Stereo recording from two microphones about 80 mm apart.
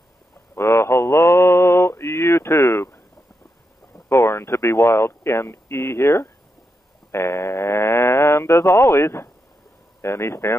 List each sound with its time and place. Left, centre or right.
0.6 s mantra: left
4.1 s a sound: left
10.0 s speech: left